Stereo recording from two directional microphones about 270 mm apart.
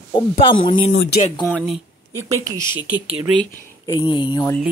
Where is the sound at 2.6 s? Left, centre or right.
Centre.